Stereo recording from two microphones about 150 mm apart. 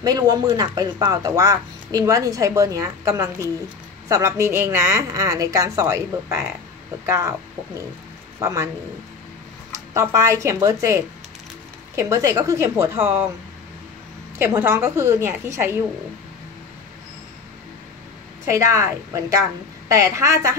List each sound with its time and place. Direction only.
0.0 s speech: 25° right (ahead or behind)
8.4 s speech: 20° right (ahead or behind)
9.9 s speech: 20° right (ahead or behind)
14.4 s a woman's voice: 15° right (ahead or behind)
18.5 s speech: 20° right (ahead or behind)